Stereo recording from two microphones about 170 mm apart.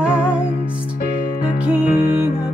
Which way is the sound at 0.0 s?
5° right (ahead or behind).